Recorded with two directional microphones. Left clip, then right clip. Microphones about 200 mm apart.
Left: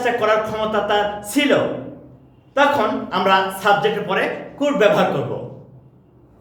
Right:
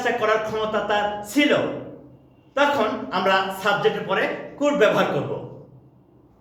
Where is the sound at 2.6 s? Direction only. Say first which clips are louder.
Left 4 dB; 20° left (ahead or behind).